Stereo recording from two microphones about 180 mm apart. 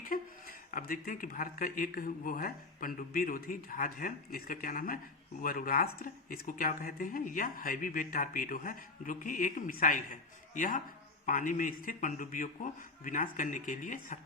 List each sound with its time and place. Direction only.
0.0 s speech: 50° left (ahead or behind)